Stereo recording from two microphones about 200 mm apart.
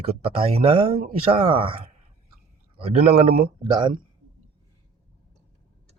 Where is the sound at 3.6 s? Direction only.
25° right (ahead or behind).